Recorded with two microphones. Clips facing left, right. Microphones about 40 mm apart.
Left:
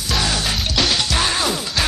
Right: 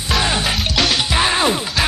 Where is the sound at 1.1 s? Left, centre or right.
Right.